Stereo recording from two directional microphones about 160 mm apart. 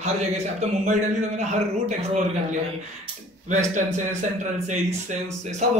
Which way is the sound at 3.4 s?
50° right (ahead or behind).